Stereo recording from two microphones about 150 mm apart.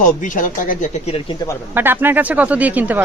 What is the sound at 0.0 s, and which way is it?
Speech, 60° left (ahead or behind).